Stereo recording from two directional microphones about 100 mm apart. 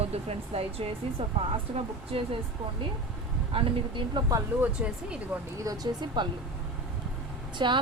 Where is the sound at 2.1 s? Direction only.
70° right (ahead or behind).